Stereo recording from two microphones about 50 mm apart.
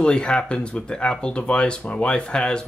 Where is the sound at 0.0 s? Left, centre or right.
Centre.